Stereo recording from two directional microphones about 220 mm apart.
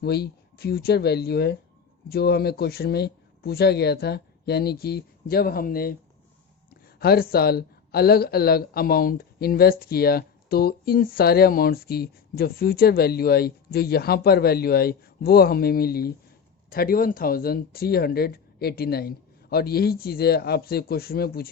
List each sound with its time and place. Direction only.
0.0 s speech: 45° left (ahead or behind)